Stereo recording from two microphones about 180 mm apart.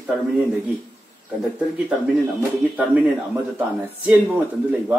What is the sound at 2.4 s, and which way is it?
Speech, 10° right (ahead or behind).